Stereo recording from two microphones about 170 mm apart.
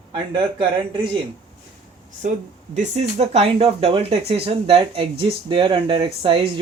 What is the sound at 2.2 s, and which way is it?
Speech, 45° right (ahead or behind).